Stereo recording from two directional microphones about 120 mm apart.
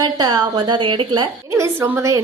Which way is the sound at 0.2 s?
35° right (ahead or behind).